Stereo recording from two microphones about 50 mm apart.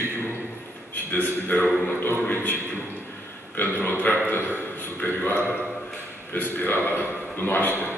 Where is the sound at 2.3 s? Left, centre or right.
Left.